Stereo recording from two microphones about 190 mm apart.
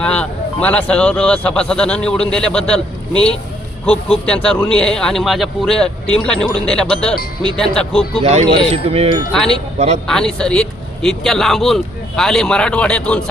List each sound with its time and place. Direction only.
0.0 s a man's voice: 5° left (ahead or behind)
3.8 s a man's voice: 5° left (ahead or behind)
8.2 s speech: 35° right (ahead or behind)
9.3 s a man's voice: 5° left (ahead or behind)
9.7 s speech: 35° right (ahead or behind)
10.1 s a man's voice: 5° left (ahead or behind)